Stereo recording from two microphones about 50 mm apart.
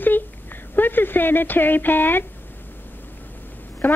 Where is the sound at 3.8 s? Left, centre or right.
Left.